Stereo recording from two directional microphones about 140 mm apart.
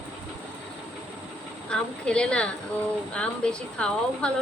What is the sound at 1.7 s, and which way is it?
A woman's voice, 5° left (ahead or behind).